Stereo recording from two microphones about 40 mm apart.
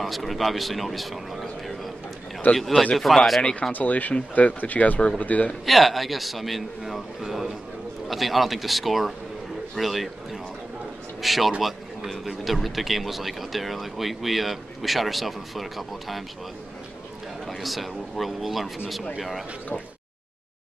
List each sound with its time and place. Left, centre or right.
0.0 s speech: centre
3.7 s speech: left
5.7 s speech: centre
17.5 s speech: centre